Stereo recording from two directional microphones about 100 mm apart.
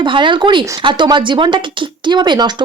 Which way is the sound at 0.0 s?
55° right (ahead or behind).